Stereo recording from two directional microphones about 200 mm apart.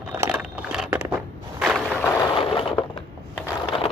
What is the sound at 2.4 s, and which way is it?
Crushing, 30° left (ahead or behind).